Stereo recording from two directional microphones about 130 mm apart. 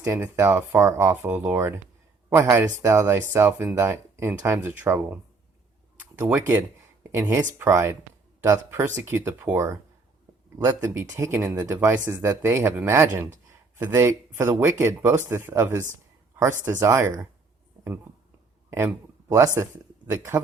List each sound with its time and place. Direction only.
0.0 s speech: 20° right (ahead or behind)
18.7 s speech: 20° right (ahead or behind)